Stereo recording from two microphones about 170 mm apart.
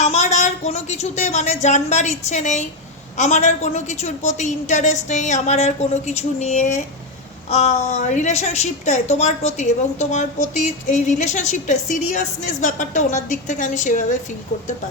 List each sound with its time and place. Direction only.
0.0 s a woman's voice: 40° left (ahead or behind)